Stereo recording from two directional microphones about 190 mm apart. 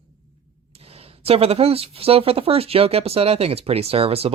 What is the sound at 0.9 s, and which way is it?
Speech, 30° right (ahead or behind).